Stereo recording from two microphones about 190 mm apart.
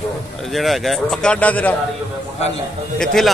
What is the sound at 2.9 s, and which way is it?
Speech, centre (ahead or behind).